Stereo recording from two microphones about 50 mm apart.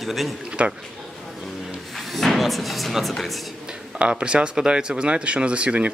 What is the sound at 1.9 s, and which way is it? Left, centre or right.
Speech, centre.